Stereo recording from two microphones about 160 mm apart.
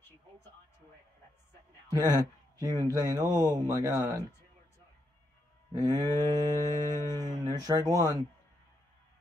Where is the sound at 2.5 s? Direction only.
25° right (ahead or behind).